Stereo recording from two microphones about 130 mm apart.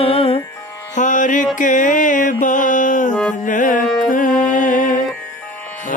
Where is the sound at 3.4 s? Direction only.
90° left.